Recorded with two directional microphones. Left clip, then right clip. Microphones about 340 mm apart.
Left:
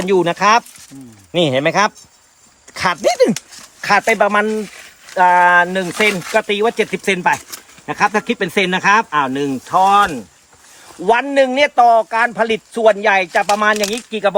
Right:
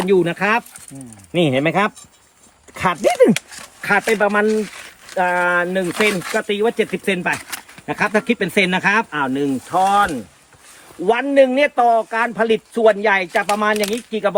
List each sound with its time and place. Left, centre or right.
0.1 s speech: centre
3.8 s a man's voice: centre
5.9 s speech: centre
6.3 s a man's voice: left